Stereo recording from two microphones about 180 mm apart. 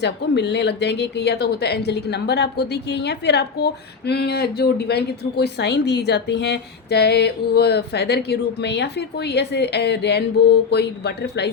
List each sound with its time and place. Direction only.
0.0 s speech: 70° left (ahead or behind)